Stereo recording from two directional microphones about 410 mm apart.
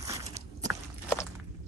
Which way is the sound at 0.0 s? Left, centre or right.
Centre.